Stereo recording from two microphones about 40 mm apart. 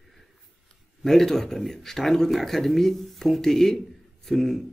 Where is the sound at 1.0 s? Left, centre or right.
Centre.